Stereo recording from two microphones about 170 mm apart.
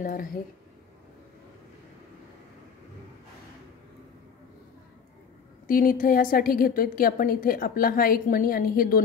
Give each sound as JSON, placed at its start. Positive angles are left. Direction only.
{"t": 0.0, "sound": "speech", "side_deg": 55}
{"t": 5.7, "sound": "a woman's voice", "side_deg": 55}